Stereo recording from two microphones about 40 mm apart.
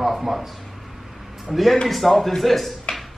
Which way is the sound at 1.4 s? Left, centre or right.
Centre.